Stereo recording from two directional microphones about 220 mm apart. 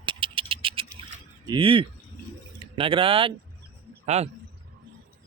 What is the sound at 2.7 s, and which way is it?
A man's voice, 25° right (ahead or behind).